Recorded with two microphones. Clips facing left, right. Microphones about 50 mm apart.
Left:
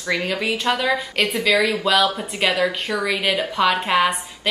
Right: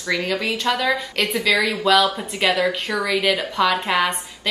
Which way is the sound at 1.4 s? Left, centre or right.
Centre.